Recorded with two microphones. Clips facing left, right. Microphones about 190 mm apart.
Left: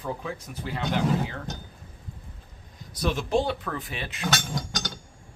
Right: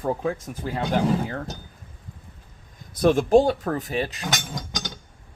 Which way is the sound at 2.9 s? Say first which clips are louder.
Right 9 dB; 50° right (ahead or behind).